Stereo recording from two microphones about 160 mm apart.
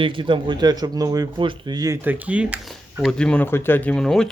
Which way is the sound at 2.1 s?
10° right (ahead or behind).